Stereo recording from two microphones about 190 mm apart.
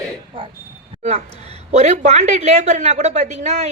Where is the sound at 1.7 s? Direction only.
35° right (ahead or behind).